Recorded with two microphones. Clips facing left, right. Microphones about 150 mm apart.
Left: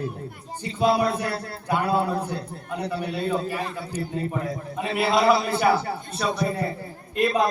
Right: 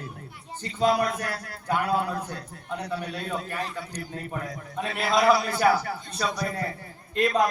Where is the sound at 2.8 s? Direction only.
10° left (ahead or behind).